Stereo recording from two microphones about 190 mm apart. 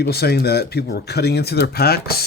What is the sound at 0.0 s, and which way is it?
Speech, 55° left (ahead or behind).